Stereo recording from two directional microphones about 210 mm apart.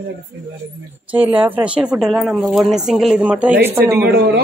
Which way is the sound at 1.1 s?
5° right (ahead or behind).